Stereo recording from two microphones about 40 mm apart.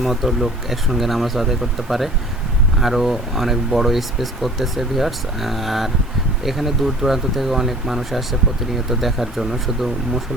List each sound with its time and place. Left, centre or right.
0.0 s speech: centre